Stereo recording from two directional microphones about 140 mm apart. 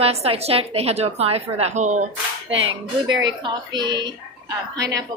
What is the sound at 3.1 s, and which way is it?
Speech, 30° right (ahead or behind).